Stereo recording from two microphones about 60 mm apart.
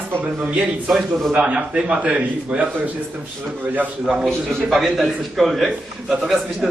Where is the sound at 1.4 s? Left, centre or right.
Centre.